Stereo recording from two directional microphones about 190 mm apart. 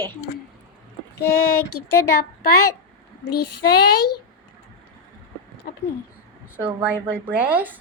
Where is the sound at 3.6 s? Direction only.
55° left (ahead or behind).